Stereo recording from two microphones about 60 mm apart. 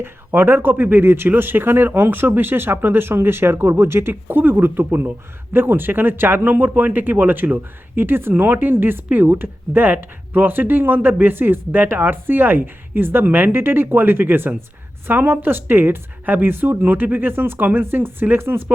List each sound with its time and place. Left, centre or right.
0.0 s speech: right